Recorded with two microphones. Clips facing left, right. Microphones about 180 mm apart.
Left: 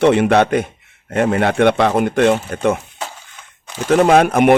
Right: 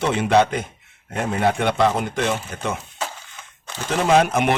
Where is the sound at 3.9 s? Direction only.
55° left (ahead or behind).